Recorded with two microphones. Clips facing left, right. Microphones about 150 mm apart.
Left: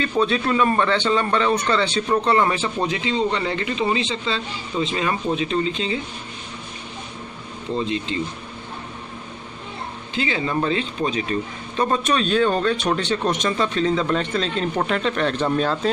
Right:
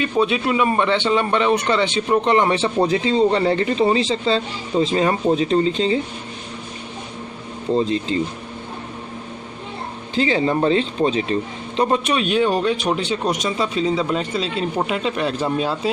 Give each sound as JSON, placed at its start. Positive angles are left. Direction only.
{"t": 0.0, "sound": "a man's voice", "side_deg": -15}
{"t": 7.7, "sound": "a man's voice", "side_deg": -35}
{"t": 10.1, "sound": "speech", "side_deg": -35}